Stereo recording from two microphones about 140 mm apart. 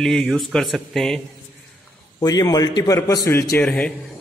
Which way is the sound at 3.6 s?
5° left (ahead or behind).